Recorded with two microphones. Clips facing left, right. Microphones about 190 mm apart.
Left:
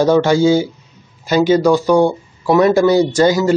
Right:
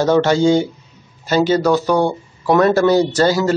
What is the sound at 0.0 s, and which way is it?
Speech, 10° left (ahead or behind).